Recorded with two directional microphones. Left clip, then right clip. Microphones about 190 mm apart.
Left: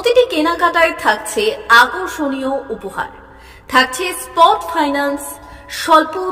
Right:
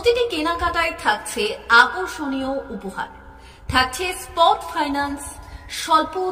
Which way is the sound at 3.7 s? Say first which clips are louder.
Left 6 dB; 15° left (ahead or behind).